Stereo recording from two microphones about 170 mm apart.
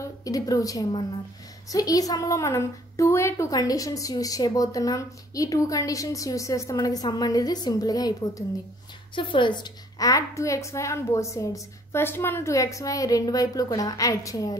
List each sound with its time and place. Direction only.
0.0 s a woman's voice: 20° left (ahead or behind)